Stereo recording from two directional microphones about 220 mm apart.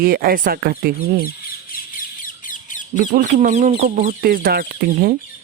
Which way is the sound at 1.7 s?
40° left (ahead or behind).